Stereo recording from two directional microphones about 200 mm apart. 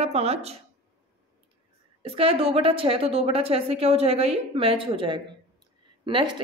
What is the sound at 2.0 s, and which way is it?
A woman's voice, 25° right (ahead or behind).